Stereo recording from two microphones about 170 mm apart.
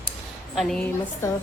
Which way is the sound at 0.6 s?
5° left (ahead or behind).